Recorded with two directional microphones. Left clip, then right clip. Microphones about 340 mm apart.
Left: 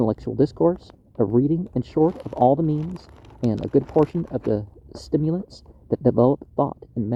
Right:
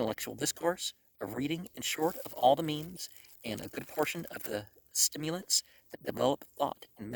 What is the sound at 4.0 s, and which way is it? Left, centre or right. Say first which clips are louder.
Speech: left 12 dB; right.